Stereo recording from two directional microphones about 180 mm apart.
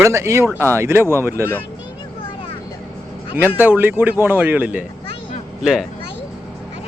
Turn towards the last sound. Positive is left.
turn(degrees=-5)  # may be behind; listen again after turning